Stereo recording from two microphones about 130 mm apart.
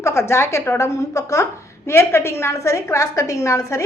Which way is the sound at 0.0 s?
20° left (ahead or behind).